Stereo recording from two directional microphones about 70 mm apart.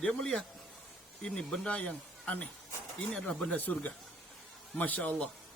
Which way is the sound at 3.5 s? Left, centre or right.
Left.